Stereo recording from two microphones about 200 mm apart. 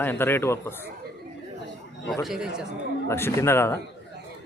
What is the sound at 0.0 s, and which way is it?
Speech, 10° left (ahead or behind).